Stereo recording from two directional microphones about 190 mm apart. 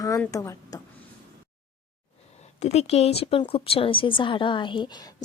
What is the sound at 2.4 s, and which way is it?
Speech, 35° left (ahead or behind).